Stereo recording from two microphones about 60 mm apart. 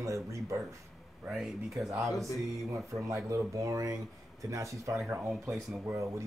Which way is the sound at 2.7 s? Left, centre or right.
Right.